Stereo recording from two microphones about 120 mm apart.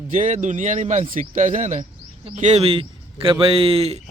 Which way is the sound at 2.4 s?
60° right (ahead or behind).